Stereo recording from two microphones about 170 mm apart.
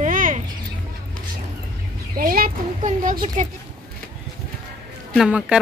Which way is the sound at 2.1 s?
60° right (ahead or behind).